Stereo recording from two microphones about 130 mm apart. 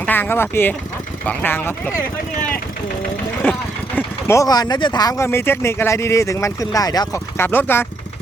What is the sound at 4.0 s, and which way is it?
Speech, 20° left (ahead or behind).